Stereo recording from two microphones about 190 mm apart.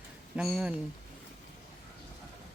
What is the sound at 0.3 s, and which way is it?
Speech, 5° right (ahead or behind).